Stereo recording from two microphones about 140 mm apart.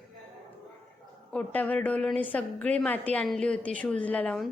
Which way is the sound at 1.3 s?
10° left (ahead or behind).